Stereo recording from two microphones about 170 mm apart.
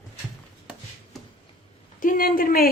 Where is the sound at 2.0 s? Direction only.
55° left (ahead or behind).